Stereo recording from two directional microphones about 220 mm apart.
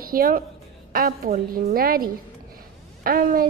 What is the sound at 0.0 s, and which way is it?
A woman's voice, 40° right (ahead or behind).